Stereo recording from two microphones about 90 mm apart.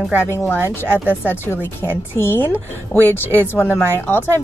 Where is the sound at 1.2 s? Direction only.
25° left (ahead or behind).